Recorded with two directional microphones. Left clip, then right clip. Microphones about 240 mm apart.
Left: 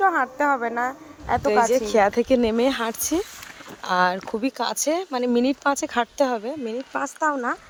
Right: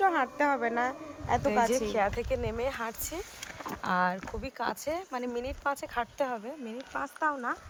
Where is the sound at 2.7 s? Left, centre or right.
Left.